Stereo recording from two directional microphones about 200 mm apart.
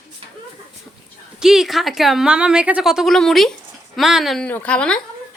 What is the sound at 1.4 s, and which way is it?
A woman's voice, centre (ahead or behind).